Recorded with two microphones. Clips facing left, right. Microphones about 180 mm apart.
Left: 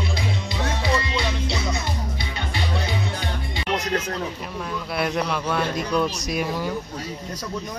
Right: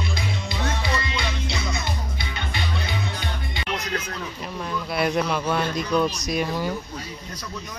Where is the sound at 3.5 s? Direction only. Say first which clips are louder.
Left 5 dB; 35° left (ahead or behind).